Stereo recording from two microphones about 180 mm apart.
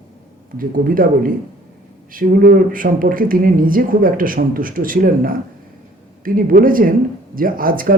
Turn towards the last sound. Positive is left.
turn(degrees=-50)  # may be behind; listen again after turning